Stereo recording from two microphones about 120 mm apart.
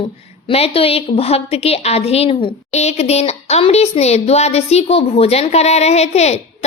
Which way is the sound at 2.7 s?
65° left (ahead or behind).